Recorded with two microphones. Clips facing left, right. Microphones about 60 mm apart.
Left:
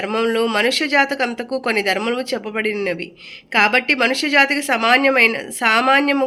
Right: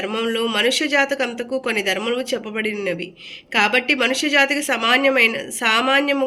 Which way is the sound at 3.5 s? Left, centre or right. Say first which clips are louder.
Left 2 dB; left.